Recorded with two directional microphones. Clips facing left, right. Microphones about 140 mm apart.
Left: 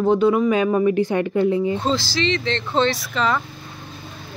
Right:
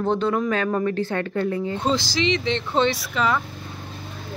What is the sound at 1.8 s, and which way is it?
Speech, 15° right (ahead or behind).